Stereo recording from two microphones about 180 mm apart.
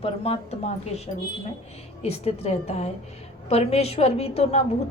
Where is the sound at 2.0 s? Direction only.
35° left (ahead or behind).